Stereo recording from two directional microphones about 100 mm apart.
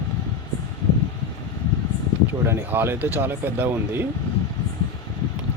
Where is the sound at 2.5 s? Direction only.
25° right (ahead or behind).